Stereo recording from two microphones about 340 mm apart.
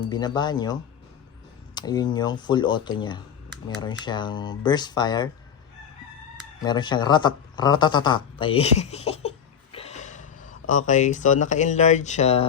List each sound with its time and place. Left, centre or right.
0.0 s speech: centre
6.6 s speech: centre
9.7 s a sound: centre
10.7 s speech: left